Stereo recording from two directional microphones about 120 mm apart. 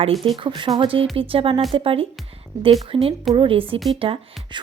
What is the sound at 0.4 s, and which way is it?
Speech, 45° right (ahead or behind).